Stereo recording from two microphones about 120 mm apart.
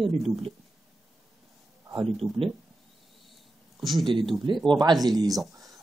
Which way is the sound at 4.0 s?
45° right (ahead or behind).